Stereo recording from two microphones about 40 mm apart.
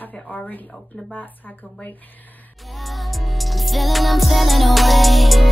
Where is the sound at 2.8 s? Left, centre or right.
Centre.